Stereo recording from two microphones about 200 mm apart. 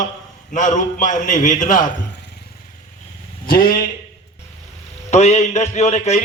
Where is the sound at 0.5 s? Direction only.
40° left (ahead or behind).